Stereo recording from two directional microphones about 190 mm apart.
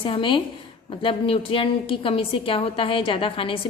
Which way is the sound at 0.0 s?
25° left (ahead or behind).